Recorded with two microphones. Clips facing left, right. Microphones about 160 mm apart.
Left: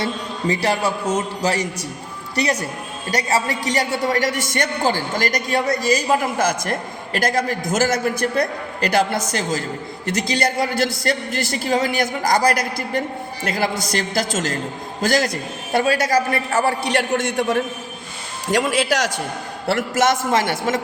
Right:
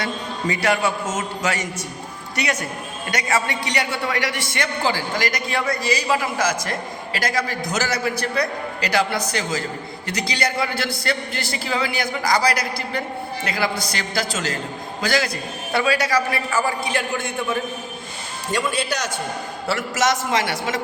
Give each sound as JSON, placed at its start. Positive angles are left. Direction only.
{"t": 0.0, "sound": "a man's voice", "side_deg": 35}
{"t": 16.5, "sound": "a man's voice", "side_deg": 65}
{"t": 18.5, "sound": "a man's voice", "side_deg": 90}
{"t": 19.6, "sound": "a man's voice", "side_deg": 55}